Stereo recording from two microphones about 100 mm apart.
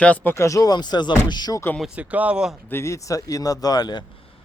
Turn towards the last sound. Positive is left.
turn(degrees=40)  # may be behind; listen again after turning